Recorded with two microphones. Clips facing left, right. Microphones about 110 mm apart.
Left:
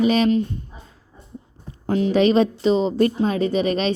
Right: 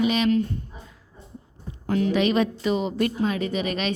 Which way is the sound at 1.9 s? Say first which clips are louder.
Left 4 dB; 25° left (ahead or behind).